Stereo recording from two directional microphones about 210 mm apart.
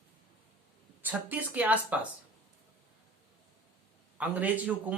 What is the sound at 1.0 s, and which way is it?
A man's voice, 10° right (ahead or behind).